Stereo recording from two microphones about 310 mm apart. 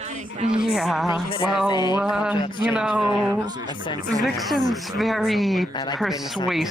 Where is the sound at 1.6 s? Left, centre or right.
Centre.